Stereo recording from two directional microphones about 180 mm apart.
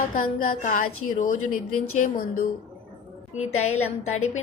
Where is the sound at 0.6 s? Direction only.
50° left (ahead or behind).